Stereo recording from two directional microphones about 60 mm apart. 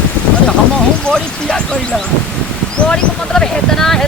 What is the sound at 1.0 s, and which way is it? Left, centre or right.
Speech, centre.